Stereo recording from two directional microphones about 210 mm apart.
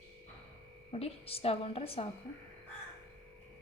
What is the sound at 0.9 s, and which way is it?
A woman's voice, 30° left (ahead or behind).